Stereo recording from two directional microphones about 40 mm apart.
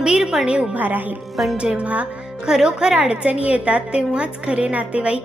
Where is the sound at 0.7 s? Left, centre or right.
Right.